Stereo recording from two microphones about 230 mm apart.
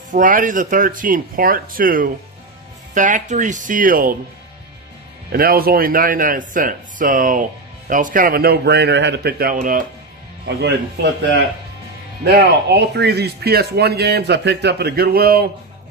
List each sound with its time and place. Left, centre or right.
0.1 s speech: right
5.3 s speech: right